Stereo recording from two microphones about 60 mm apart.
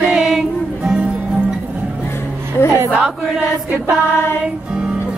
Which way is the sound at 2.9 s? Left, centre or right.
Centre.